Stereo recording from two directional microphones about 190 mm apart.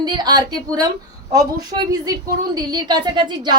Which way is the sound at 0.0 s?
20° right (ahead or behind).